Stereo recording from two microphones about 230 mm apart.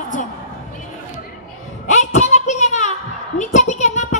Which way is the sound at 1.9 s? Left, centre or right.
Left.